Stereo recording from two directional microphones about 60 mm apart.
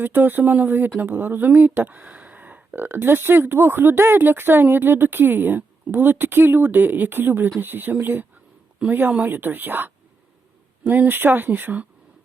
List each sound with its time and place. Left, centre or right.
0.0 s speech: right